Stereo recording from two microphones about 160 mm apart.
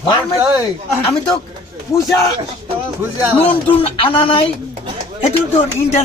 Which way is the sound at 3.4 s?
35° left (ahead or behind).